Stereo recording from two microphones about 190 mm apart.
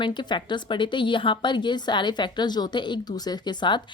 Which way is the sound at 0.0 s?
25° left (ahead or behind).